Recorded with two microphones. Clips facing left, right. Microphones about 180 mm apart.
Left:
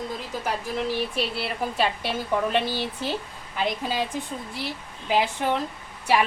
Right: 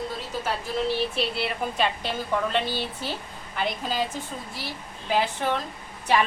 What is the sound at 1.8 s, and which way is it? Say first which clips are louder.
A woman's voice: left 1 dB; 10° left (ahead or behind).